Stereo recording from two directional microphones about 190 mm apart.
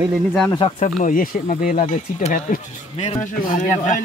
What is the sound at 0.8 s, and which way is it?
Speech, 45° left (ahead or behind).